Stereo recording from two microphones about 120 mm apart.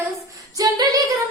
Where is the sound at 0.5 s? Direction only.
30° right (ahead or behind).